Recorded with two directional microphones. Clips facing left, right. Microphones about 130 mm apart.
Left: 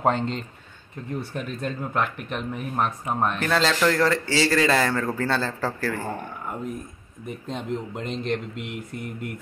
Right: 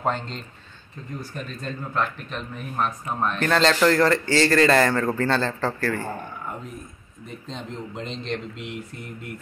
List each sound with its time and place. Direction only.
0.0 s speech: 20° left (ahead or behind)
3.3 s a man's voice: 5° left (ahead or behind)
7.2 s speech: 10° left (ahead or behind)